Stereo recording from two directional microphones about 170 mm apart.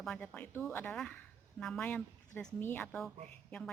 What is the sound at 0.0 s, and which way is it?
A woman's voice, 5° left (ahead or behind).